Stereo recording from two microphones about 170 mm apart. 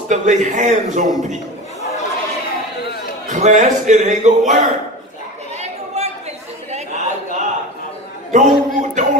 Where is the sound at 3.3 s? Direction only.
45° right (ahead or behind).